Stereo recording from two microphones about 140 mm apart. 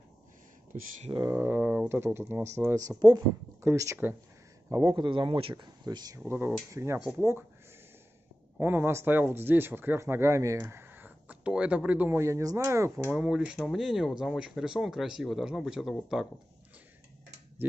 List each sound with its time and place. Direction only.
0.7 s speech: 65° right (ahead or behind)
1.1 s speech: 25° right (ahead or behind)
4.8 s speech: 35° right (ahead or behind); by 7.4 s 15° right (ahead or behind)
8.5 s speech: 15° right (ahead or behind)